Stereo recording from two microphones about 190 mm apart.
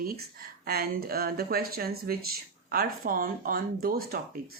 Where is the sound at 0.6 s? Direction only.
55° right (ahead or behind).